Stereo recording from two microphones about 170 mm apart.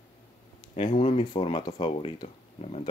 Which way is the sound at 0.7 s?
40° left (ahead or behind).